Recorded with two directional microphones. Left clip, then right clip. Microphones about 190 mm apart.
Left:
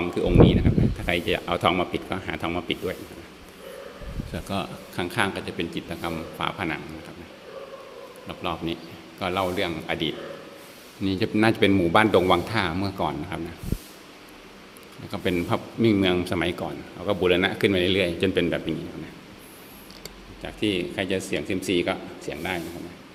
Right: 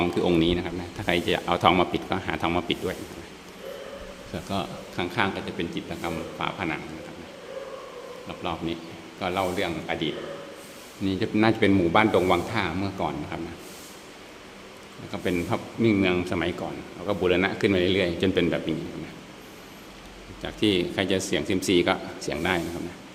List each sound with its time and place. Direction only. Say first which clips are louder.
0.1 s speech: left 3 dB; 5° right (ahead or behind)
4.4 s speech: even; 10° left (ahead or behind)
8.3 s speech: left 2 dB; 20° left (ahead or behind)
15.1 s speech: left 2 dB; 15° left (ahead or behind)
20.4 s speech: right 2 dB; 10° right (ahead or behind)